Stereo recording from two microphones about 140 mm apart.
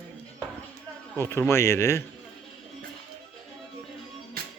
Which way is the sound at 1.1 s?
15° left (ahead or behind).